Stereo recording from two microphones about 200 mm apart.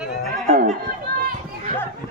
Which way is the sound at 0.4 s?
45° right (ahead or behind).